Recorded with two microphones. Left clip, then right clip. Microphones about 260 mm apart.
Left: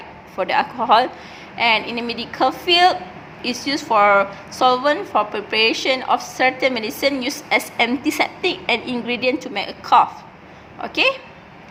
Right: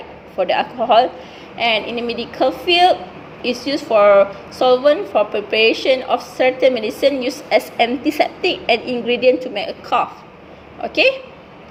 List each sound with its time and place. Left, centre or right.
0.3 s a woman's voice: left
1.9 s a woman's voice: centre
8.0 s a woman's voice: left
9.6 s a woman's voice: centre